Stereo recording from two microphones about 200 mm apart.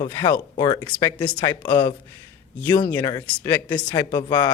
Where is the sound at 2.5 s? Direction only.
10° left (ahead or behind).